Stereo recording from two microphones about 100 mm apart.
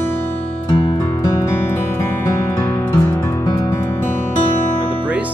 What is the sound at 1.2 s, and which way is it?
Music, 25° left (ahead or behind).